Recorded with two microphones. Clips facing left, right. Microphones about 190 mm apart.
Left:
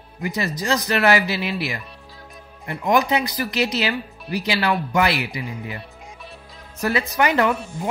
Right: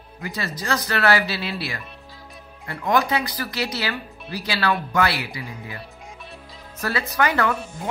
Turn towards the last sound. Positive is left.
turn(degrees=20)  # may be behind; listen again after turning